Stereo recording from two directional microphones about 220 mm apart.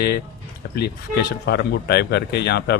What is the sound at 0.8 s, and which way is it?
A man's voice, 50° left (ahead or behind).